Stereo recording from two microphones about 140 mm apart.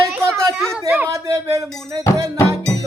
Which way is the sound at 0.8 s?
15° right (ahead or behind).